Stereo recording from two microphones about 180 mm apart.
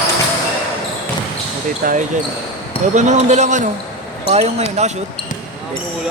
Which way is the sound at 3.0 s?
40° right (ahead or behind).